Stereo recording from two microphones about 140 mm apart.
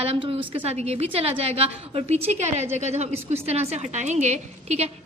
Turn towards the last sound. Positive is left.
turn(degrees=-50)  # may be behind; listen again after turning